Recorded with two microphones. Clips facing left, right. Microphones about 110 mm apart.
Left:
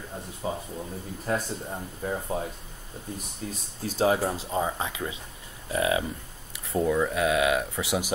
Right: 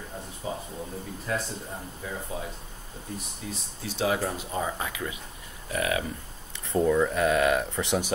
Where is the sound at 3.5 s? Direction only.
40° left (ahead or behind).